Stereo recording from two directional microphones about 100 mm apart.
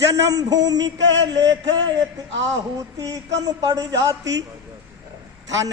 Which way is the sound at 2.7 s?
40° right (ahead or behind).